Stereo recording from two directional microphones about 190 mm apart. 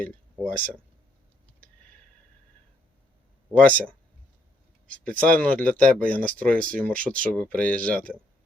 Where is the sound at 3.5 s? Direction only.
5° left (ahead or behind).